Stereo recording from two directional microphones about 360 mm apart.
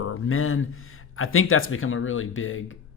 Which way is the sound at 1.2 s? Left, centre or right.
Left.